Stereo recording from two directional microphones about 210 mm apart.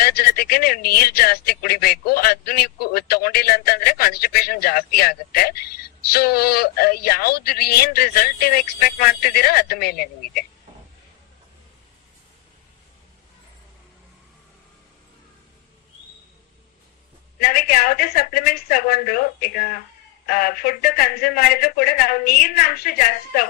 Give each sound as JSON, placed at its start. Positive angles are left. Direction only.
{"t": 0.0, "sound": "speech", "side_deg": 50}
{"t": 17.4, "sound": "speech", "side_deg": 50}